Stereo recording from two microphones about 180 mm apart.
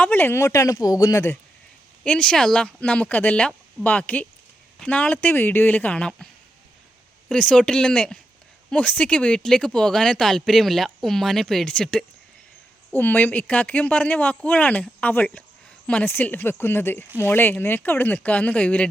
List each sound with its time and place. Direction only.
0.0 s speech: 10° left (ahead or behind)
7.3 s speech: 5° left (ahead or behind)